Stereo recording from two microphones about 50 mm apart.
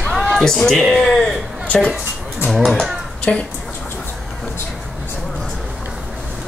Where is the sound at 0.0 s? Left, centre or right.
Centre.